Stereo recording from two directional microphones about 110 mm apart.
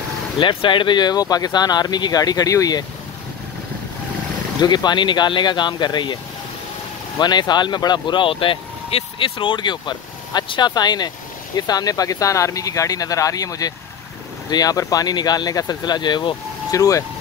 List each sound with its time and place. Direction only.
0.4 s speech: 50° left (ahead or behind); by 2.8 s 30° left (ahead or behind)
4.6 s speech: 40° left (ahead or behind)
7.2 s speech: 40° left (ahead or behind)